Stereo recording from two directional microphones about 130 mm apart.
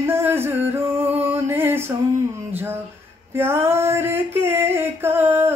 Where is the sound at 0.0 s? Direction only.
20° right (ahead or behind).